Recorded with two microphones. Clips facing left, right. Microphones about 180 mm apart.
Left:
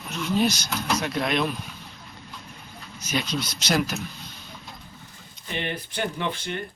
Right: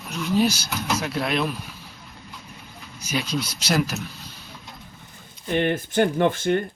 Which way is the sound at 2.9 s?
10° right (ahead or behind).